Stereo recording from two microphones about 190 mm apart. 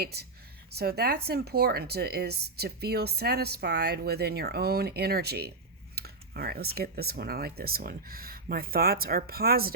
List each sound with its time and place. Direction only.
0.0 s speech: 55° right (ahead or behind)